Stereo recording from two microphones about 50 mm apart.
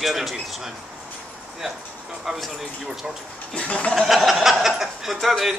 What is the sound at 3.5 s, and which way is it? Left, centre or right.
Speech, left.